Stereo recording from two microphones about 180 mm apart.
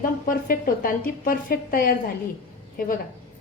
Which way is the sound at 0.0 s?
50° left (ahead or behind).